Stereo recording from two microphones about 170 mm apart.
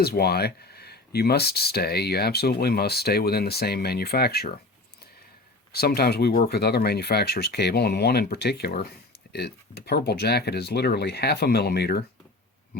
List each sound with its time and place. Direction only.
0.0 s speech: 65° left (ahead or behind)
5.7 s speech: 65° left (ahead or behind)